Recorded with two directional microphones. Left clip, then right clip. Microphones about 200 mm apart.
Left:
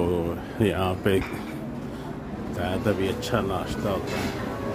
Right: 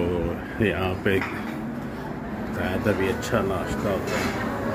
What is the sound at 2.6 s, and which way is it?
Speech, 15° left (ahead or behind).